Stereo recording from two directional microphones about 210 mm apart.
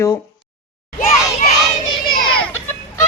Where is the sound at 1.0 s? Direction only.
35° left (ahead or behind).